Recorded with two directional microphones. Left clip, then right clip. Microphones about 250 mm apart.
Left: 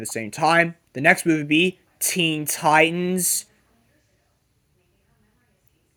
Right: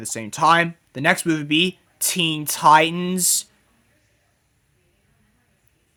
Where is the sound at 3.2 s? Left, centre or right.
Right.